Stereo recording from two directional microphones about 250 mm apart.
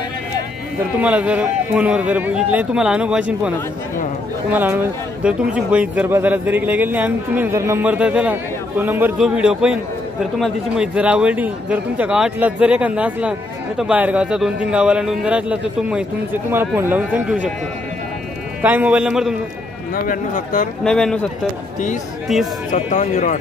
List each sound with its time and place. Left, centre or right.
1.0 s speech: centre
18.6 s speech: centre
20.1 s speech: left
20.8 s speech: centre
22.7 s speech: left